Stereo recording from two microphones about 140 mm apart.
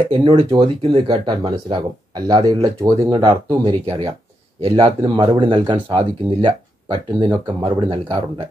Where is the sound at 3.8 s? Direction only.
40° right (ahead or behind).